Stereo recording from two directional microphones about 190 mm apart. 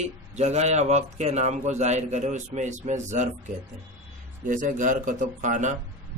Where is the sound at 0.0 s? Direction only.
35° right (ahead or behind).